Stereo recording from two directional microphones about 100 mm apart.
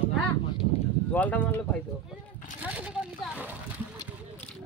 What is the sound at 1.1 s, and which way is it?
Speech, 15° left (ahead or behind).